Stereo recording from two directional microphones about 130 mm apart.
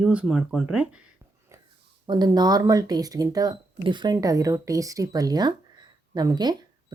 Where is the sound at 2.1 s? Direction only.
35° right (ahead or behind).